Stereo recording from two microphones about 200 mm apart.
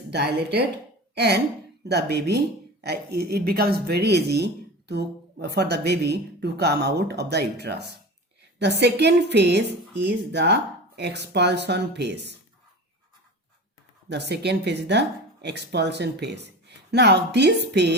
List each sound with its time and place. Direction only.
0.1 s speech: 55° right (ahead or behind)
14.1 s speech: 55° right (ahead or behind)